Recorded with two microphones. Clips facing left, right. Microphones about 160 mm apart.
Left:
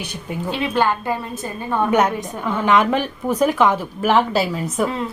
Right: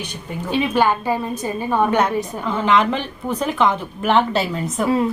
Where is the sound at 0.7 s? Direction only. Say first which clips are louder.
Even; 10° right (ahead or behind).